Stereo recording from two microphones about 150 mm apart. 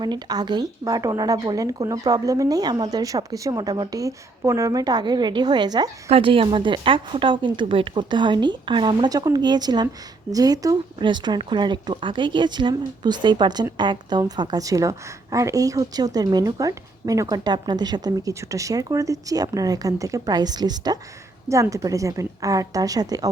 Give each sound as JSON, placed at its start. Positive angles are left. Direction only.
{"t": 0.0, "sound": "a woman's voice", "side_deg": -30}
{"t": 6.1, "sound": "a woman's voice", "side_deg": -40}